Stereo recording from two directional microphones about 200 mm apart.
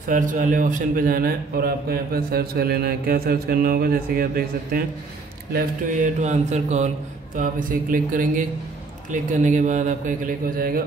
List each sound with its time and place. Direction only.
0.1 s a man's voice: 40° right (ahead or behind)